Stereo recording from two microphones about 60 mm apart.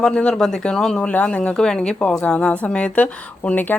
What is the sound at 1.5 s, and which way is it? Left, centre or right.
Speech, centre.